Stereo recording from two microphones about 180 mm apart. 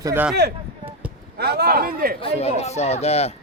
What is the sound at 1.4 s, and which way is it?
Speech, 60° right (ahead or behind).